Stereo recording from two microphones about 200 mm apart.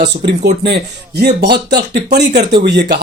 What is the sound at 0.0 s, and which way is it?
Speech, 50° right (ahead or behind).